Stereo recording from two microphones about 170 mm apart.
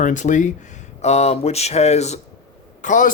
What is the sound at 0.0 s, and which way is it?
A man's voice, 50° left (ahead or behind).